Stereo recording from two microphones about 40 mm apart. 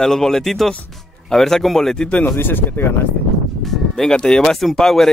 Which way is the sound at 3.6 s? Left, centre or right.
Centre.